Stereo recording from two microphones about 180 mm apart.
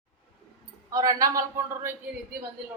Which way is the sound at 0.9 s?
20° right (ahead or behind).